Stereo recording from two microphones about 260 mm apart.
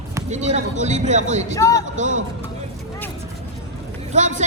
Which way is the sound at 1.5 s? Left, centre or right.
Centre.